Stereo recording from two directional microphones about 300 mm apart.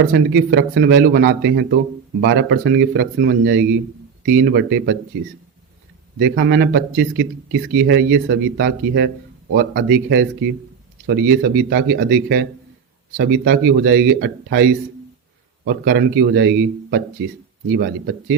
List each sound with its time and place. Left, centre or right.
0.1 s speech: right
6.1 s speech: right